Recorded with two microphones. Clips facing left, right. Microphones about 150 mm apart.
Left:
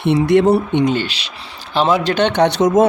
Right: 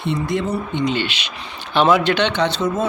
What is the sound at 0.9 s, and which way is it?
Speech, 40° left (ahead or behind).